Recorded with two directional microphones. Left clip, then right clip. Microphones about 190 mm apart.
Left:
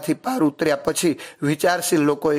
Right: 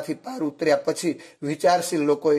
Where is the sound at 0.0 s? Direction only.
25° left (ahead or behind).